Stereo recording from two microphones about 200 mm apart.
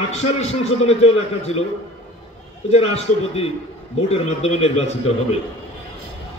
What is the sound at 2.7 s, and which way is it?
A man's voice, 30° left (ahead or behind).